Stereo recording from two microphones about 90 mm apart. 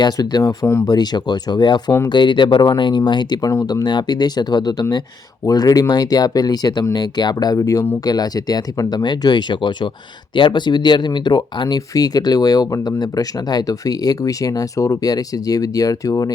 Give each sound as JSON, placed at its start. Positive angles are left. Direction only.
{"t": 0.0, "sound": "speech", "side_deg": 45}
{"t": 0.7, "sound": "speech", "side_deg": 35}
{"t": 0.9, "sound": "speech", "side_deg": 50}
{"t": 2.1, "sound": "speech", "side_deg": 60}